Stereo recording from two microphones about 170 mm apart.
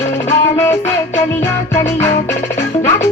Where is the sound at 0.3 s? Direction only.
15° left (ahead or behind).